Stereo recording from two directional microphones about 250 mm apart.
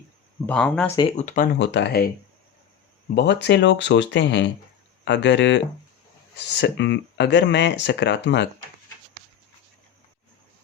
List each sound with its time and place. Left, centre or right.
0.4 s speech: centre
0.9 s speech: left
1.5 s speech: left
3.2 s speech: left